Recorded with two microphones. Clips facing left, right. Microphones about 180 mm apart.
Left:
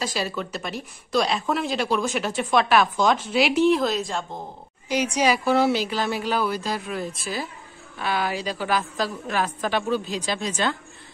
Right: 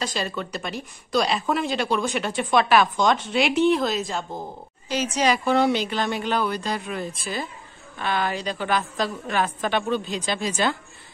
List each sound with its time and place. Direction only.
0.0 s a woman's voice: 5° left (ahead or behind)
4.8 s a woman's voice: 10° left (ahead or behind); by 10.8 s 10° right (ahead or behind)